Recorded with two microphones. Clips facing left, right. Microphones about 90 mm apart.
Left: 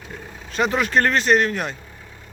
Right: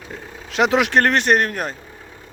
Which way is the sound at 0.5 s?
85° right.